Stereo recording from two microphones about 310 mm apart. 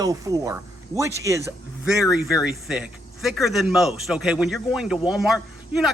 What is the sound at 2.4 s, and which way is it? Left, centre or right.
Speech, centre.